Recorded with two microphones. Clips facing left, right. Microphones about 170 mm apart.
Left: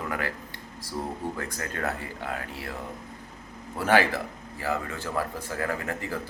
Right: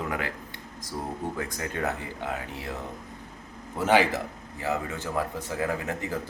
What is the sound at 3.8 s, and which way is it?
A man's voice, 20° right (ahead or behind).